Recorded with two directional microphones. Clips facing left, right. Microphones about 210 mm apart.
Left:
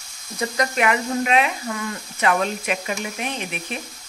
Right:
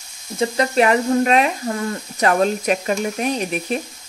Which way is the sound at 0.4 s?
30° right (ahead or behind).